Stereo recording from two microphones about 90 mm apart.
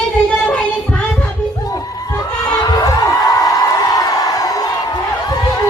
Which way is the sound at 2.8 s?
40° left (ahead or behind).